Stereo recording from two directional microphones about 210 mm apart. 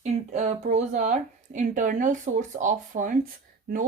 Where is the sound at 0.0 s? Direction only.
35° right (ahead or behind).